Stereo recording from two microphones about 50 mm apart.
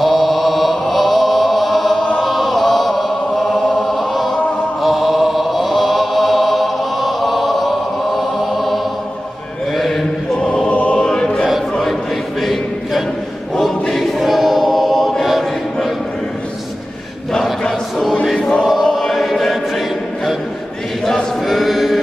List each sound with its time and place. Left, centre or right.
0.0 s chant: centre
10.3 s choir: centre
12.4 s a sound: centre
13.6 s choir: centre
17.6 s choir: centre
21.4 s choir: centre